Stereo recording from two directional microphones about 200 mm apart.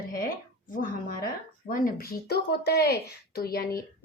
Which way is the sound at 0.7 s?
45° left (ahead or behind).